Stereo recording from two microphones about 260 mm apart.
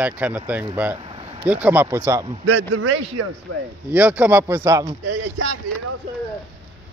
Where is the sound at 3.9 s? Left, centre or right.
Centre.